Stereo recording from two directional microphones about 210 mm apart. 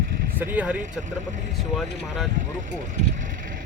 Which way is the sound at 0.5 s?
5° right (ahead or behind).